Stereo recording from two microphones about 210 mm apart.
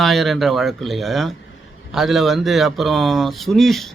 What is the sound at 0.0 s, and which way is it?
Speech, centre (ahead or behind).